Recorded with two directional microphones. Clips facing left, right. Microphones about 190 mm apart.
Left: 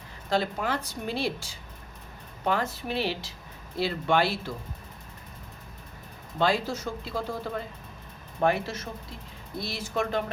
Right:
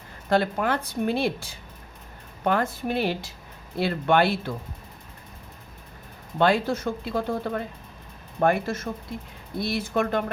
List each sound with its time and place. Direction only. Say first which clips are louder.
0.3 s a woman's voice: right 5 dB; 55° right (ahead or behind)
6.4 s a woman's voice: right 4 dB; 60° right (ahead or behind)